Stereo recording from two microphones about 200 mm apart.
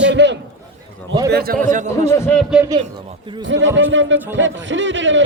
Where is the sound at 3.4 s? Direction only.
70° right (ahead or behind).